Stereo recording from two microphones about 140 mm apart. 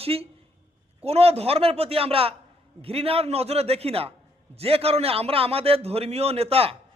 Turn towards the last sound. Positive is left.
turn(degrees=-45)  # may be behind; listen again after turning